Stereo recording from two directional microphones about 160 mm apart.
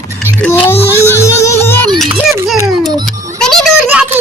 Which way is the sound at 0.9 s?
15° left (ahead or behind).